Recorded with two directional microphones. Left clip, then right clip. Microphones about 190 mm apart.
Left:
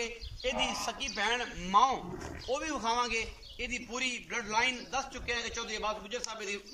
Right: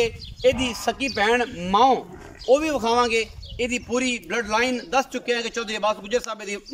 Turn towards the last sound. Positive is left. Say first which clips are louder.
# right 11 dB
turn(degrees=-65)  # may be behind; listen again after turning